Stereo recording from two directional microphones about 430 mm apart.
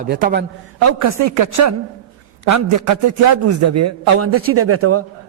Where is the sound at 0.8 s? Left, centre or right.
Right.